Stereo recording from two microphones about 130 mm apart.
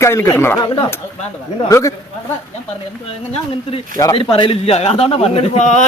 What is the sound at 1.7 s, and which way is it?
Speech, 25° left (ahead or behind).